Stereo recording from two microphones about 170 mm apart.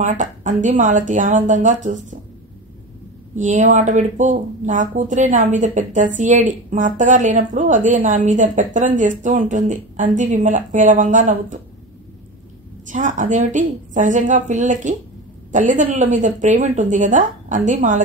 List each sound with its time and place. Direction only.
0.0 s speech: 45° right (ahead or behind)
3.3 s speech: 45° right (ahead or behind)
12.8 s speech: 50° right (ahead or behind)